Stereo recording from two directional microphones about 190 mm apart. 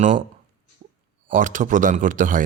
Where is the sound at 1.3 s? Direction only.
45° right (ahead or behind).